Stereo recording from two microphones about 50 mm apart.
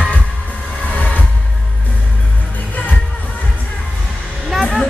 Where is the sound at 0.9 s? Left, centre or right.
Left.